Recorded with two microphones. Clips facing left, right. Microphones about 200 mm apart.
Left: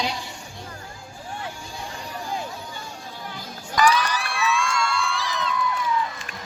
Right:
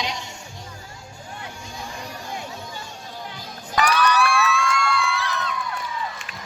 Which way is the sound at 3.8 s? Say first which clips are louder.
Right 1 dB; 65° right (ahead or behind).